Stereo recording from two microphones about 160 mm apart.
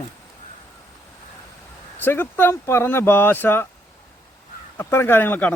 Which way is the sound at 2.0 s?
15° left (ahead or behind).